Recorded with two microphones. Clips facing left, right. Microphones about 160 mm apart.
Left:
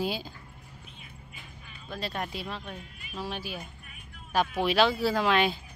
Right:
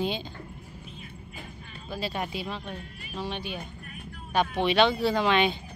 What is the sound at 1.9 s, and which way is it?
Speech, centre (ahead or behind).